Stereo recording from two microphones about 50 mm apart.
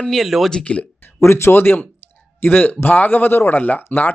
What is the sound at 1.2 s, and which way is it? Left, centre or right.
Speech, left.